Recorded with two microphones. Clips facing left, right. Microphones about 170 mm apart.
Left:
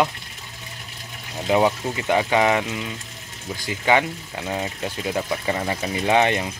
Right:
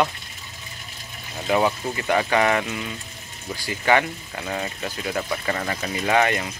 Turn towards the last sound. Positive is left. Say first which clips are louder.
# left 2 dB
turn(degrees=20)  # may be behind; listen again after turning